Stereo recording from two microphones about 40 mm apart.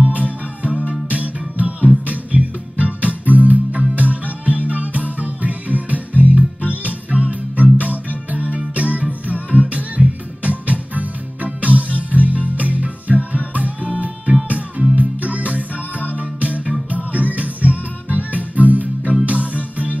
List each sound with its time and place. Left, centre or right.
0.0 s music: right